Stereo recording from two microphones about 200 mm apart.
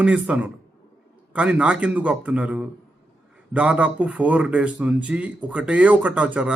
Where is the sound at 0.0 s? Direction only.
5° right (ahead or behind).